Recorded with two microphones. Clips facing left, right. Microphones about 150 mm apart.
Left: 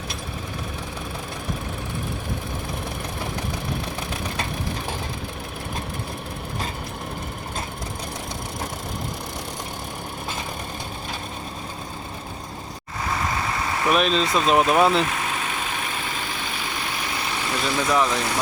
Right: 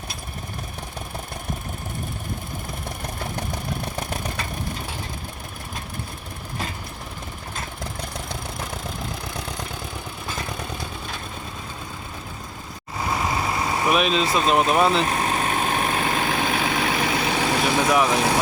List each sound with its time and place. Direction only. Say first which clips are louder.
13.9 s speech: left 1 dB; 5° right (ahead or behind)
15.0 s vehicle: right 4 dB; 40° right (ahead or behind); by 17.6 s 85° right
17.9 s speech: even; 10° right (ahead or behind)